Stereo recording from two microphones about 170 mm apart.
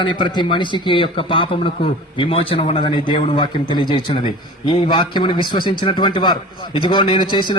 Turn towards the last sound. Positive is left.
turn(degrees=25)  # may be behind; listen again after turning